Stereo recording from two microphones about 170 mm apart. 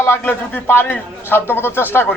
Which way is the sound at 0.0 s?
15° left (ahead or behind).